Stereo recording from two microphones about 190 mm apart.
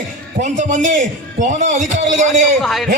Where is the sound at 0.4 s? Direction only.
40° right (ahead or behind).